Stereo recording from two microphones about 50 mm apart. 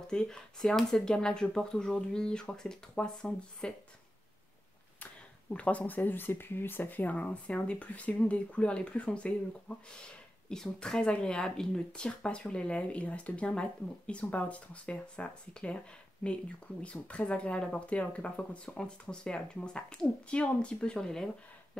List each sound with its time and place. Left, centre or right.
0.1 s speech: centre
5.0 s speech: left
10.5 s speech: centre